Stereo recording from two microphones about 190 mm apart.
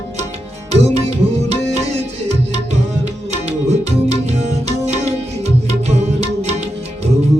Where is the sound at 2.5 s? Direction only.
35° right (ahead or behind).